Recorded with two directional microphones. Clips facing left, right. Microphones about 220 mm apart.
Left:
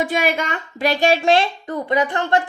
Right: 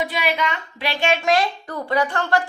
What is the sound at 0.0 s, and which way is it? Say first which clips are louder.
A woman's voice: left 3 dB; 45° left (ahead or behind).